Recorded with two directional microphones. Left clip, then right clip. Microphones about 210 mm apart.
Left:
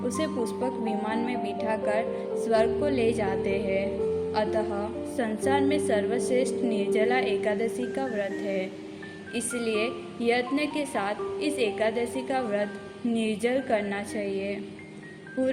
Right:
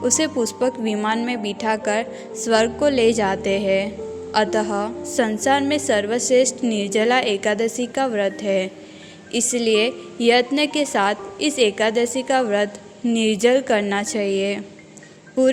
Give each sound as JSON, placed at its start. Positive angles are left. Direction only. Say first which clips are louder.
{"t": 0.0, "sound": "a woman's voice", "louder": "right 9 dB", "side_deg": -45}